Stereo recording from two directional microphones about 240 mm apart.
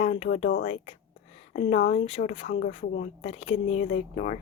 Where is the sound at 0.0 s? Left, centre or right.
Left.